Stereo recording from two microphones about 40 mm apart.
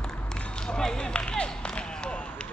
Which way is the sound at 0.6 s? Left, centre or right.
Centre.